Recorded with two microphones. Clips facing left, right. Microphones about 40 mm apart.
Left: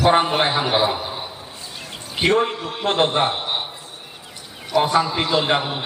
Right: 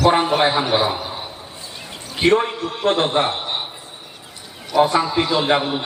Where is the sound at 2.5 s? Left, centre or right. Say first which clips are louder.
Right 3 dB; centre.